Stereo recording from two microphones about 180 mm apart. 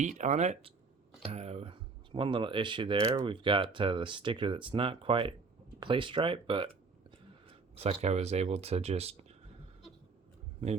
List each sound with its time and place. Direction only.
0.0 s speech: 40° right (ahead or behind)